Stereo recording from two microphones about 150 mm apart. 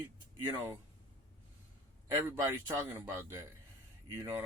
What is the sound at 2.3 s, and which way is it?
Speech, 15° right (ahead or behind).